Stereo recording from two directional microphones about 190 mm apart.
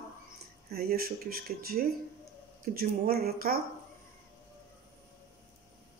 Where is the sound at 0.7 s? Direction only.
55° right (ahead or behind).